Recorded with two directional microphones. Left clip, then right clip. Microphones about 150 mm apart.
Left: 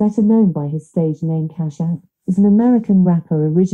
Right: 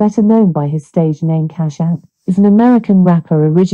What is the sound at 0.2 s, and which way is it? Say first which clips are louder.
Speech: right 3 dB; 35° right (ahead or behind).